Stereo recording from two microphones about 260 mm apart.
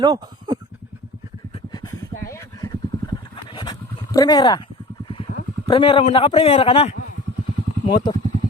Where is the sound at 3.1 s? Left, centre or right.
Centre.